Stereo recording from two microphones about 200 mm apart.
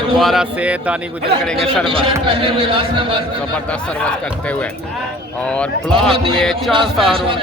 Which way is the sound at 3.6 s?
5° left (ahead or behind).